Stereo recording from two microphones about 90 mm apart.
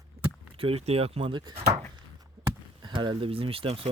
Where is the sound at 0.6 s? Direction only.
90° right; by 1.5 s 60° right (ahead or behind).